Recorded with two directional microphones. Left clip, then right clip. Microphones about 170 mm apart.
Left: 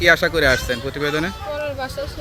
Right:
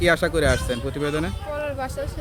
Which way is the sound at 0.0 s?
Centre (ahead or behind).